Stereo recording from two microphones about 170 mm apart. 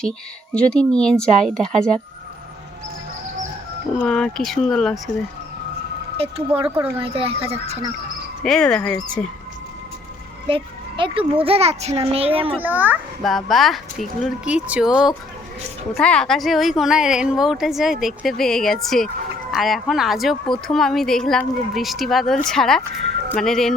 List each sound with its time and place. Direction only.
0.5 s speech: 5° left (ahead or behind)
4.0 s speech: centre (ahead or behind)
6.1 s a child's voice: 35° right (ahead or behind)
8.4 s speech: 5° left (ahead or behind)
10.5 s a child's voice: 30° right (ahead or behind)
12.6 s a child's voice: 10° right (ahead or behind)
13.2 s speech: centre (ahead or behind)